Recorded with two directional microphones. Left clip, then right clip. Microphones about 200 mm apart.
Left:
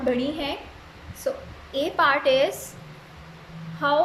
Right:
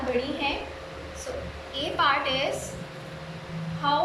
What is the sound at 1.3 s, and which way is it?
A woman's voice, 35° left (ahead or behind).